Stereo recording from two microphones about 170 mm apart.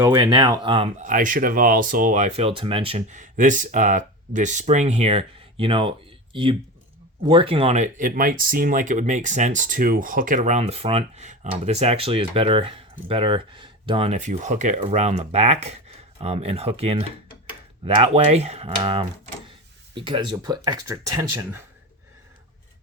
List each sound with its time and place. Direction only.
0.0 s speech: 20° right (ahead or behind)
0.9 s speech: 50° right (ahead or behind); by 21.6 s 15° right (ahead or behind)